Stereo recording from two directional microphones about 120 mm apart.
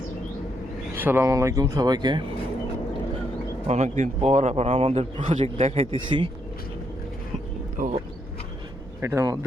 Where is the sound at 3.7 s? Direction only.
80° right; by 6.3 s 45° right (ahead or behind).